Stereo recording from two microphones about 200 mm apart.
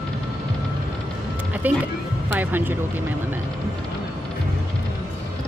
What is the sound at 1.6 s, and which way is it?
Speech, 10° right (ahead or behind).